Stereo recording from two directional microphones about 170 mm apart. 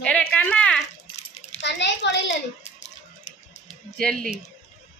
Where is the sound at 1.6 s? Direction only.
90° left.